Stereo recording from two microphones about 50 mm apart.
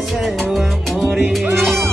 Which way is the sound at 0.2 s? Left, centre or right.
Centre.